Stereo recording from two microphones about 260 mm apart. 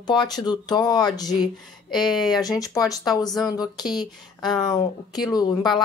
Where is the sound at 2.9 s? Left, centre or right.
Centre.